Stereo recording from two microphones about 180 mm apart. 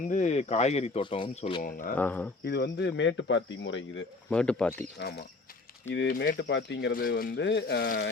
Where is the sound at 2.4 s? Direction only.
65° left (ahead or behind); by 4.0 s 90° left.